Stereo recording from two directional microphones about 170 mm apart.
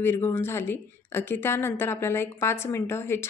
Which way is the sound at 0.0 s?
15° left (ahead or behind).